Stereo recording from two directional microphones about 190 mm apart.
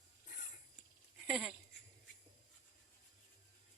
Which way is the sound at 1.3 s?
5° right (ahead or behind).